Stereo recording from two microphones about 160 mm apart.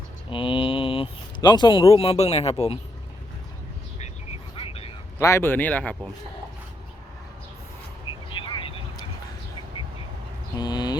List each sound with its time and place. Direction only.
0.3 s speech: 30° left (ahead or behind)
4.5 s vehicle: 35° left (ahead or behind)
5.2 s speech: 15° left (ahead or behind)
8.3 s vehicle: 30° left (ahead or behind)
10.6 s a sound: 25° left (ahead or behind)